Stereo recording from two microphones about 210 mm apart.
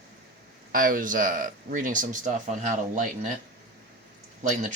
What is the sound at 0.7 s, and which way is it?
Speech, 40° right (ahead or behind).